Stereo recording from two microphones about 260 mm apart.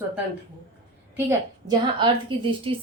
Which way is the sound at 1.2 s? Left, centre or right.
Centre.